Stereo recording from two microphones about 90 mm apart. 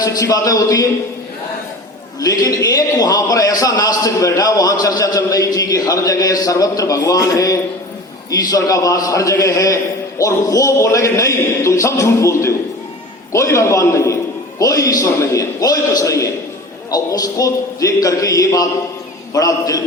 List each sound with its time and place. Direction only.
0.0 s a man's voice: 40° left (ahead or behind)
2.2 s a man's voice: 40° left (ahead or behind)